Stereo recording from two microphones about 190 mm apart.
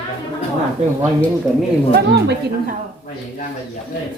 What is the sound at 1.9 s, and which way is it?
Speech, 60° right (ahead or behind).